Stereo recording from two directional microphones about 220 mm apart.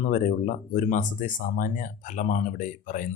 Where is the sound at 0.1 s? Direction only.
35° left (ahead or behind).